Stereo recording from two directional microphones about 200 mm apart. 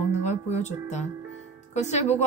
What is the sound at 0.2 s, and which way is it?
A woman's voice, 35° left (ahead or behind).